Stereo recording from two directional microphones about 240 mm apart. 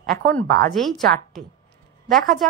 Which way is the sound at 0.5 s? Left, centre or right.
Right.